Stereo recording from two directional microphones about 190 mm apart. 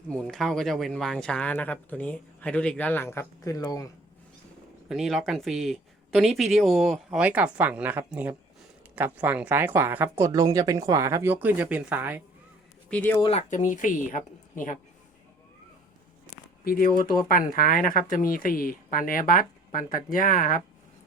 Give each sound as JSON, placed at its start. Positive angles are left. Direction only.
{"t": 0.1, "sound": "speech", "side_deg": 5}
{"t": 4.9, "sound": "speech", "side_deg": 0}
{"t": 12.9, "sound": "speech", "side_deg": 10}
{"t": 13.1, "sound": "speech", "side_deg": 25}
{"t": 13.5, "sound": "speech", "side_deg": 40}
{"t": 16.6, "sound": "speech", "side_deg": 50}